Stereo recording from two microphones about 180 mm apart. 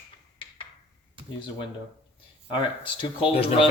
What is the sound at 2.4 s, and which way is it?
Speech, 25° left (ahead or behind).